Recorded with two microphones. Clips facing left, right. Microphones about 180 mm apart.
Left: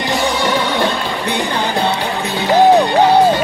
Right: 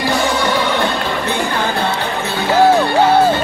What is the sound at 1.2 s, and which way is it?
Music, 15° left (ahead or behind).